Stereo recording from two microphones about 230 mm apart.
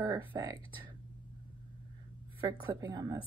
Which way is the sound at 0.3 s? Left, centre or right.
Centre.